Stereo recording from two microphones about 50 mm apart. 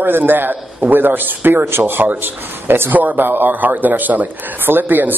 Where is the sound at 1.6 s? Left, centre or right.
Right.